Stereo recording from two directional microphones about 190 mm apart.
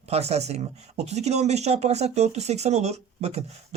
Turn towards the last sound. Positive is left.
turn(degrees=-35)  # may be behind; listen again after turning